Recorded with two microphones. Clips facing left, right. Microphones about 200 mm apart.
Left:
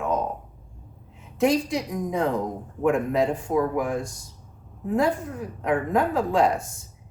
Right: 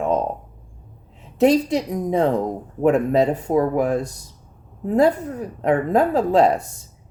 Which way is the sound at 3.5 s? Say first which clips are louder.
Right 4 dB; 40° right (ahead or behind).